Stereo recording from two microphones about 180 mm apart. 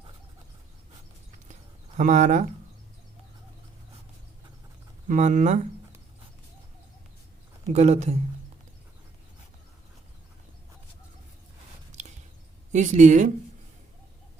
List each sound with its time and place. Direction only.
2.0 s speech: 45° right (ahead or behind)
5.0 s speech: 45° right (ahead or behind)
7.7 s speech: 40° right (ahead or behind)
11.9 s a sound: 40° right (ahead or behind)
12.7 s speech: 40° right (ahead or behind)